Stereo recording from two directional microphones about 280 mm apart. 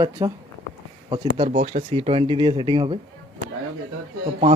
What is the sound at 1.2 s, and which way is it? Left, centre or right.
Speech, right.